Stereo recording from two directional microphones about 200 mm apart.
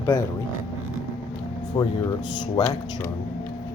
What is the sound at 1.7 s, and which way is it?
Speech, 25° left (ahead or behind).